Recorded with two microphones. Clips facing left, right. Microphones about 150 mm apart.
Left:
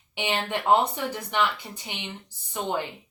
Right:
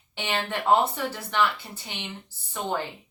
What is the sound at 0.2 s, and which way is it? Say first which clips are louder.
Speech: left 1 dB; 15° left (ahead or behind).